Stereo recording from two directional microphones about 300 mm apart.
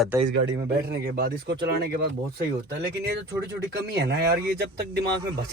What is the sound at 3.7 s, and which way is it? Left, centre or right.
Speech, right.